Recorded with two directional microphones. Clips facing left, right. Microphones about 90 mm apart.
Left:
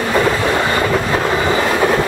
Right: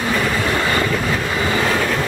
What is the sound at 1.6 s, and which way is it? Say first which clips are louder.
Train: left 4 dB; 15° left (ahead or behind).